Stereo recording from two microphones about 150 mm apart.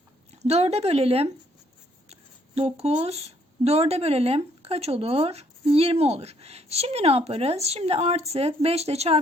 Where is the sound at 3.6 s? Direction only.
45° right (ahead or behind).